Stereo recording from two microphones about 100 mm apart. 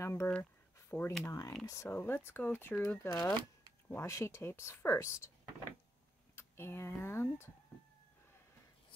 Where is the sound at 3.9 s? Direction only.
25° left (ahead or behind).